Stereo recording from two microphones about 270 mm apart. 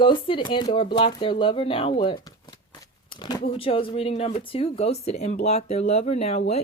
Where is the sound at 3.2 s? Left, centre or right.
Centre.